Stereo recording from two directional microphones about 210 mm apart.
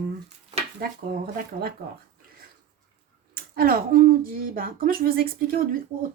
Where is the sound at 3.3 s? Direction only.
45° right (ahead or behind).